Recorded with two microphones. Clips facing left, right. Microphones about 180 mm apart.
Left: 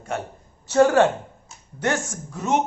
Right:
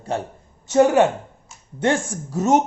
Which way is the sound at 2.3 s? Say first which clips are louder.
Right 5 dB; 40° right (ahead or behind).